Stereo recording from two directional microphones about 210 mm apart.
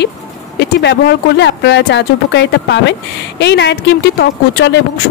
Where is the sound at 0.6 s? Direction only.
55° left (ahead or behind).